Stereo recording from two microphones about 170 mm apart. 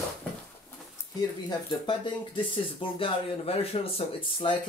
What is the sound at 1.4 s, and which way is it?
Speech, 30° left (ahead or behind).